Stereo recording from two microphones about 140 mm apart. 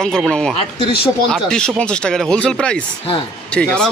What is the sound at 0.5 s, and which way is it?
Speech, 40° left (ahead or behind).